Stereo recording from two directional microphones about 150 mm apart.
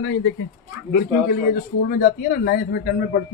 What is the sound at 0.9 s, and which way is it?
A man's voice, 90° left.